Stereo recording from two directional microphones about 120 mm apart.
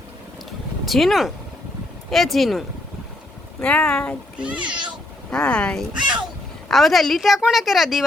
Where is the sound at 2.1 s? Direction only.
Centre (ahead or behind).